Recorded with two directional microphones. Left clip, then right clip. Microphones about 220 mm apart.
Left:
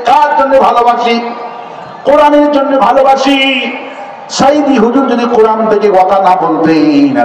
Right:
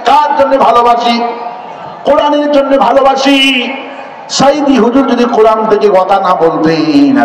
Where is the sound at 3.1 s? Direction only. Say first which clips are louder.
Right 1 dB; 40° right (ahead or behind).